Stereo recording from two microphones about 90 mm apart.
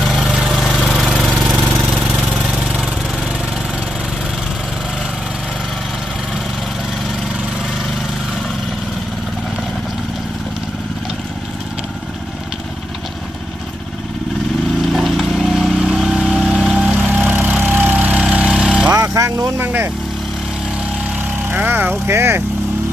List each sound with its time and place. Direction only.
0.0 s lawn mower: 5° right (ahead or behind)
1.4 s engine: 5° right (ahead or behind)
14.9 s vehicle: centre (ahead or behind)
17.1 s lawn mower: 20° right (ahead or behind)
18.9 s vehicle: 35° right (ahead or behind)
19.5 s vehicle: 20° right (ahead or behind)
21.5 s vehicle: 20° right (ahead or behind)